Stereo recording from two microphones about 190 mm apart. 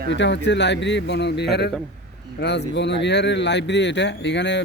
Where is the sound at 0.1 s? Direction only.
70° left (ahead or behind).